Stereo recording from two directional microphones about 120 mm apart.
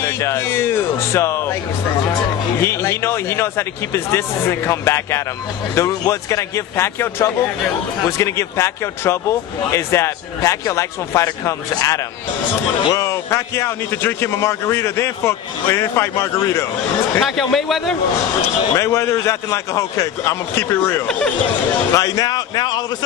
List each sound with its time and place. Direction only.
0.0 s speech: 20° left (ahead or behind)
2.6 s speech: 20° left (ahead or behind)
17.2 s speech: centre (ahead or behind)
18.8 s a man's voice: 20° left (ahead or behind)